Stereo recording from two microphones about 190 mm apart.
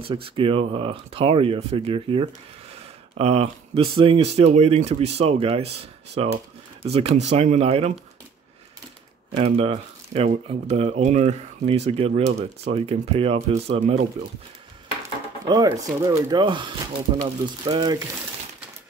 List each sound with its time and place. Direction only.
0.0 s speech: 25° right (ahead or behind)
9.3 s speech: 30° right (ahead or behind)
15.4 s speech: 20° right (ahead or behind)